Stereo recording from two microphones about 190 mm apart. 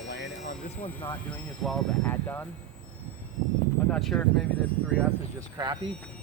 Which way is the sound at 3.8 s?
5° left (ahead or behind).